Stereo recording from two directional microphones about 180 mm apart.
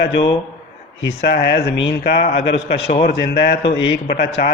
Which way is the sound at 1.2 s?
65° left (ahead or behind).